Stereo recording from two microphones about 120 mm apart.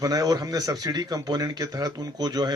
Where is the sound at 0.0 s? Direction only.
30° right (ahead or behind).